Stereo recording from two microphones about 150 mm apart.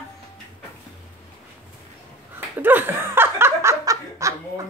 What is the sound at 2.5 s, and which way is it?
Snicker, 15° right (ahead or behind).